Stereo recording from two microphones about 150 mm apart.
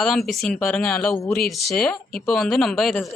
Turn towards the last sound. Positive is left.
turn(degrees=0)  # may be behind; listen again after turning